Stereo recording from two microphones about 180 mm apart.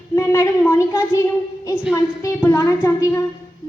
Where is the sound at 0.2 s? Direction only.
15° left (ahead or behind).